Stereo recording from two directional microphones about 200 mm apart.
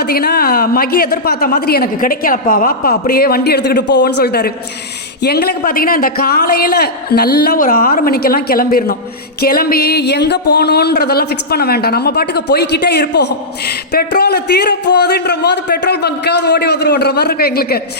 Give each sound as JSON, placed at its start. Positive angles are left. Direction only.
{"t": 0.0, "sound": "speech", "side_deg": 50}